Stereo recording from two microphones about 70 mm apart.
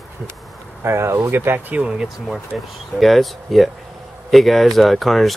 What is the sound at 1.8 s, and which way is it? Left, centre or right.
Speech, centre.